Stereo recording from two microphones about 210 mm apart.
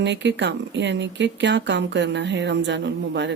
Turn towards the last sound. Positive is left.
turn(degrees=-55)  # may be behind; listen again after turning